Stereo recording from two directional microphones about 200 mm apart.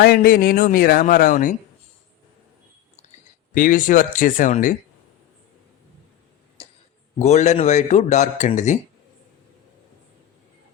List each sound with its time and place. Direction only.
0.0 s speech: 50° left (ahead or behind)
3.5 s a man's voice: 40° left (ahead or behind)
7.2 s a man's voice: 35° left (ahead or behind)